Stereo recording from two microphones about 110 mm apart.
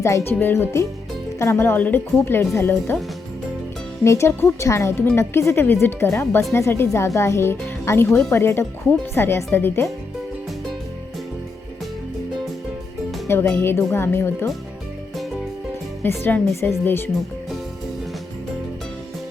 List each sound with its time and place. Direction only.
0.0 s speech: 25° left (ahead or behind)
4.0 s speech: 25° left (ahead or behind)
13.2 s speech: 25° left (ahead or behind)
16.0 s speech: 20° left (ahead or behind)